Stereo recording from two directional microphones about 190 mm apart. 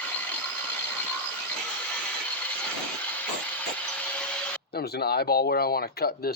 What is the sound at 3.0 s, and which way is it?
Vehicle, 10° left (ahead or behind).